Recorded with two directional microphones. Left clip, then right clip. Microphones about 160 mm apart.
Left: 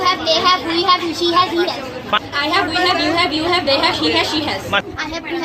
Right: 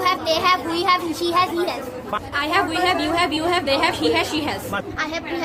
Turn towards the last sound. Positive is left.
turn(degrees=-40)  # may be behind; listen again after turning